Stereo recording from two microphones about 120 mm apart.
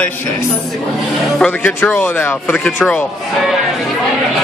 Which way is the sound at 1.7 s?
15° left (ahead or behind).